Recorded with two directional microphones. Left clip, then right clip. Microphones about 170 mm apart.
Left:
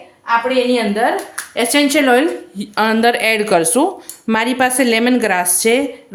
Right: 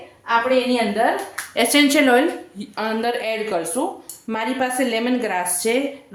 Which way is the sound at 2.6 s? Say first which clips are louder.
Left 9 dB; 40° left (ahead or behind).